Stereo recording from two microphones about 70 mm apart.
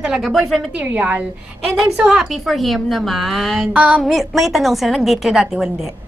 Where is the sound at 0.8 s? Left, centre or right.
Centre.